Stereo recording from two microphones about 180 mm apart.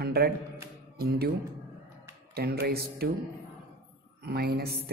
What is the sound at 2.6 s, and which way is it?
Speech, 60° right (ahead or behind).